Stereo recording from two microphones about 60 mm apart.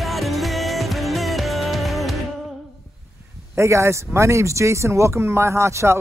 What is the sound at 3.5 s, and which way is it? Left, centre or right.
Speech, right.